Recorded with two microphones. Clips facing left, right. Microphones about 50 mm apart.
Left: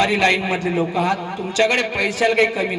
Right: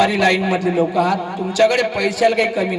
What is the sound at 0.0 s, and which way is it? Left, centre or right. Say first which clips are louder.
A man's voice: right 2 dB; left.